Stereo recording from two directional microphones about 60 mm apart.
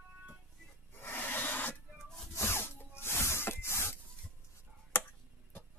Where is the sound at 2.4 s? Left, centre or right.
Left.